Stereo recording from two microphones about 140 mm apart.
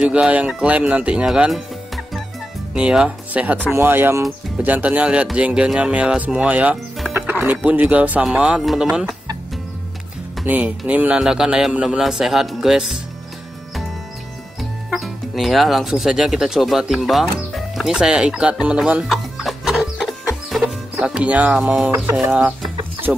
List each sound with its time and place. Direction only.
0.0 s speech: 5° right (ahead or behind)
2.7 s speech: 5° right (ahead or behind)
10.4 s a man's voice: 10° right (ahead or behind)
14.6 s music: centre (ahead or behind)
20.9 s a man's voice: 10° right (ahead or behind)